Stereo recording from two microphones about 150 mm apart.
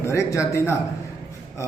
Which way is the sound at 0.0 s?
20° left (ahead or behind).